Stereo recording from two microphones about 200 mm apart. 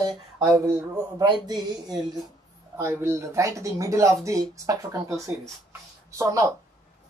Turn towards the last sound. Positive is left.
turn(degrees=-15)  # may be behind; listen again after turning